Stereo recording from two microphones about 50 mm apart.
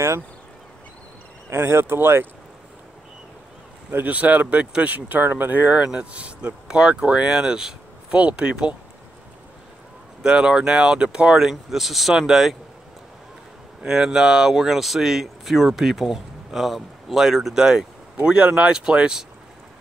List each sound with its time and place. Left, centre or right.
1.5 s speech: right
3.9 s speech: right
5.8 s speech: right
7.2 s speech: centre
8.1 s speech: right
10.2 s speech: centre
13.8 s speech: centre